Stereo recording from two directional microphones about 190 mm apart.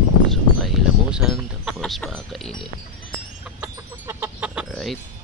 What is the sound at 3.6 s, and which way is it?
Chicken, 10° right (ahead or behind).